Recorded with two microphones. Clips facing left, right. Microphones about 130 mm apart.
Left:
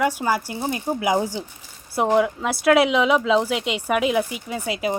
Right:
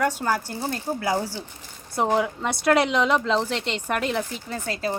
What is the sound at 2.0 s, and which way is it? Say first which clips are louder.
Speech: left 3 dB; centre (ahead or behind).